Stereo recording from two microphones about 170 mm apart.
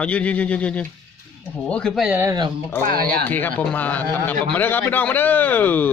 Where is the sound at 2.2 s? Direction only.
20° right (ahead or behind).